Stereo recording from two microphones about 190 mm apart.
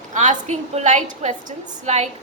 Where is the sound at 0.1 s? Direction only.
40° right (ahead or behind).